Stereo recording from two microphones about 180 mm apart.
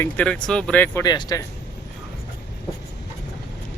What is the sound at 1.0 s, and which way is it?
Speech, 20° left (ahead or behind).